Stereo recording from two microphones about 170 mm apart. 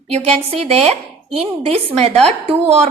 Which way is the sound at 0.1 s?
35° right (ahead or behind).